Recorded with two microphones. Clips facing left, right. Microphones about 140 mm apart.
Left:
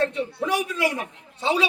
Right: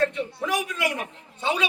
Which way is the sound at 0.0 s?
30° left (ahead or behind).